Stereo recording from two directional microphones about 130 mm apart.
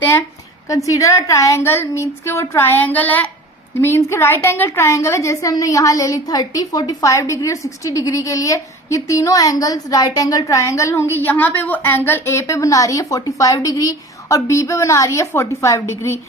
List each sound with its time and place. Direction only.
0.0 s a woman's voice: 15° left (ahead or behind)